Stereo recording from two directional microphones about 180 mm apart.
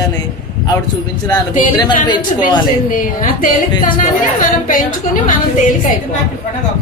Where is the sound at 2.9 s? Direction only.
50° left (ahead or behind).